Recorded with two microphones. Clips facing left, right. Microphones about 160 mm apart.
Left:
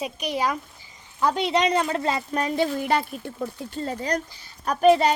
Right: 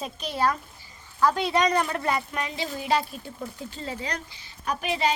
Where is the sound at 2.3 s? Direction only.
40° left (ahead or behind).